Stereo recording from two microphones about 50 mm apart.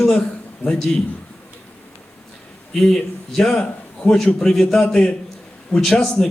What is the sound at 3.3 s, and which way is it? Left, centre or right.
A man's voice, centre.